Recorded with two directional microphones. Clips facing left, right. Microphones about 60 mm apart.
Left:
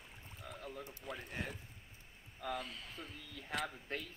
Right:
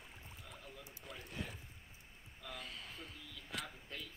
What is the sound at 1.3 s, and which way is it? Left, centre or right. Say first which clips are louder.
Speech: left 1 dB; left.